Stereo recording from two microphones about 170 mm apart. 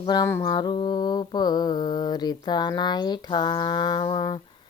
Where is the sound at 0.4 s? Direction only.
25° left (ahead or behind).